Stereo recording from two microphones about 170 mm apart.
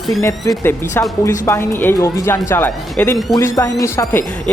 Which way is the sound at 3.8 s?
15° left (ahead or behind).